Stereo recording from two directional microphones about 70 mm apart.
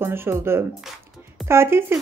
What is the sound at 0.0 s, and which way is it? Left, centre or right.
A woman's voice, right.